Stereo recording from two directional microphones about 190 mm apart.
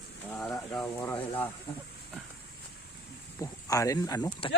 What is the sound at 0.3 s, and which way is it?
Speech, 5° left (ahead or behind).